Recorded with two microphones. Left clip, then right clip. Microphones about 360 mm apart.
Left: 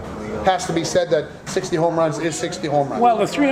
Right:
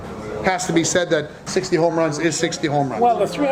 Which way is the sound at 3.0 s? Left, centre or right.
Left.